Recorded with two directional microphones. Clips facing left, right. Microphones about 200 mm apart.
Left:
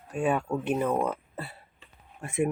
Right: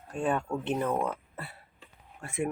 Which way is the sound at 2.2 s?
20° left (ahead or behind).